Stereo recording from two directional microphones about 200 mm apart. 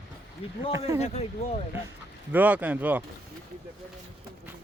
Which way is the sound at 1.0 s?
30° left (ahead or behind).